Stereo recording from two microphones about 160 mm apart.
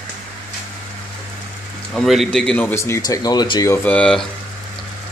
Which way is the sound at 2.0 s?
Centre (ahead or behind).